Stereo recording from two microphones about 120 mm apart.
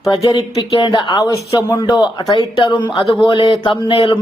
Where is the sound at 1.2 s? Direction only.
30° left (ahead or behind).